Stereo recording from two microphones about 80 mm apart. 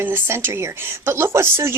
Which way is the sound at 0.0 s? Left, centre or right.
Right.